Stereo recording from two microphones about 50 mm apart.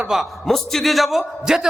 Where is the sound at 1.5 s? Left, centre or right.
Centre.